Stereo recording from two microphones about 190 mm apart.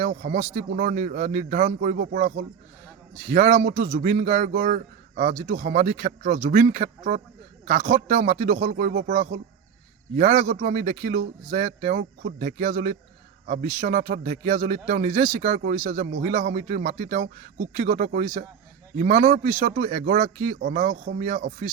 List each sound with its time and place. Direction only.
0.1 s speech: 60° right (ahead or behind)
0.5 s a man's voice: 45° right (ahead or behind)
8.8 s speech: 55° right (ahead or behind)
10.4 s a man's voice: 55° right (ahead or behind)
10.8 s a man's voice: 40° right (ahead or behind); by 21.0 s 55° right (ahead or behind)
21.0 s a man's voice: 40° right (ahead or behind)